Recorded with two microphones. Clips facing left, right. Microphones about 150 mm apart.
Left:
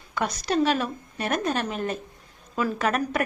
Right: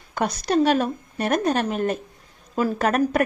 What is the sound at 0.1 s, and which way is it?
A woman's voice, 50° right (ahead or behind).